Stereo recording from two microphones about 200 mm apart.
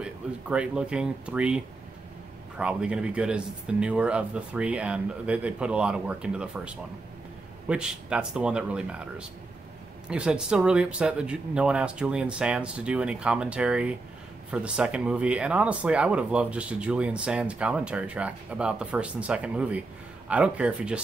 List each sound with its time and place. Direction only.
0.0 s speech: 5° right (ahead or behind)